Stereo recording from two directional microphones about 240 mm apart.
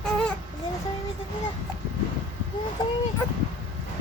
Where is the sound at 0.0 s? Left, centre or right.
Centre.